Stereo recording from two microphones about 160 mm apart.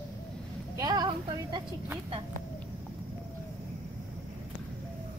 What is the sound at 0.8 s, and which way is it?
Speech, 25° right (ahead or behind).